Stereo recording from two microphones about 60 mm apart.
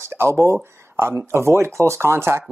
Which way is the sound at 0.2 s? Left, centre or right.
Right.